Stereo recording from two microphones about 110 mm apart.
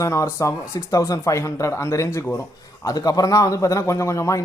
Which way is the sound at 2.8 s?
35° left (ahead or behind).